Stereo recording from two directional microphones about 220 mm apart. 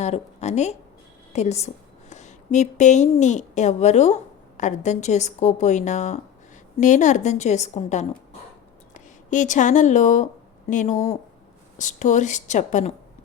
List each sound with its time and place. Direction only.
0.0 s a woman's voice: 30° left (ahead or behind)